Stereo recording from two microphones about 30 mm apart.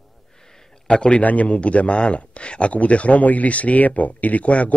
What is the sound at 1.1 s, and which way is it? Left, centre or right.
Speech, left.